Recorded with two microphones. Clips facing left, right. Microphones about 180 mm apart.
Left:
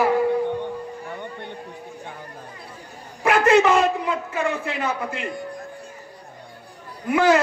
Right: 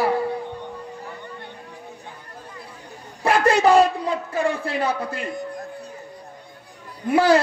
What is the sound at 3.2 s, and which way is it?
A man's voice, 35° right (ahead or behind).